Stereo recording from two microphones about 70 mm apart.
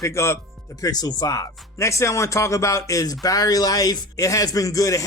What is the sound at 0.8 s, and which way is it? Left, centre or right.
Speech, left.